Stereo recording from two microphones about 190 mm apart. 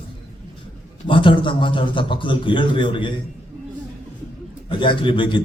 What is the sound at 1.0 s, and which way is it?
A man's voice, 25° left (ahead or behind).